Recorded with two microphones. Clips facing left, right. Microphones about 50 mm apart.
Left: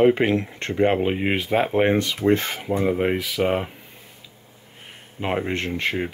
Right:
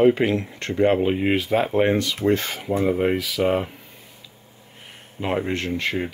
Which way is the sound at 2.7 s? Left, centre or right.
Centre.